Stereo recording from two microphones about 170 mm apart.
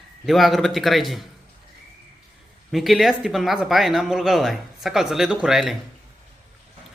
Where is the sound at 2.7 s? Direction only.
Centre (ahead or behind).